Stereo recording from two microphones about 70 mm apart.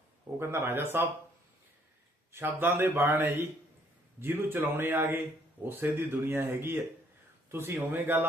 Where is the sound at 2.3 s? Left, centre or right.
Right.